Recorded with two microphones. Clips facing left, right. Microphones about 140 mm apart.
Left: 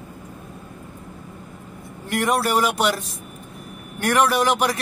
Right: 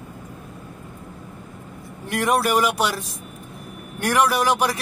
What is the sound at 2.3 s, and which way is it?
Speech, 10° right (ahead or behind).